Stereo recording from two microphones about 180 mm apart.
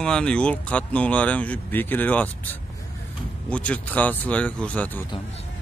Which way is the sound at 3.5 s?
5° left (ahead or behind).